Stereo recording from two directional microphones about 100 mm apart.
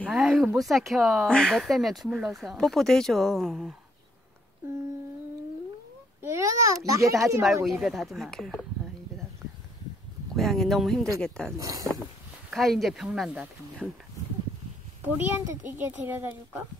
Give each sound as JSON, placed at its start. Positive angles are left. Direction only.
{"t": 0.0, "sound": "speech", "side_deg": -5}
{"t": 6.2, "sound": "a child's voice", "side_deg": -30}
{"t": 7.6, "sound": "speech", "side_deg": -5}
{"t": 10.3, "sound": "speech", "side_deg": 5}
{"t": 11.5, "sound": "a child's voice", "side_deg": -35}
{"t": 12.4, "sound": "speech", "side_deg": 0}
{"t": 13.8, "sound": "speech", "side_deg": 5}
{"t": 15.0, "sound": "a child's voice", "side_deg": -20}